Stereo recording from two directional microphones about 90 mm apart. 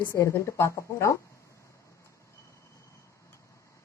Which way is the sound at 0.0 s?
25° left (ahead or behind).